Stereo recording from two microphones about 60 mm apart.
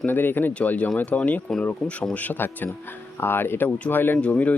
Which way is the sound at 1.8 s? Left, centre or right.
Centre.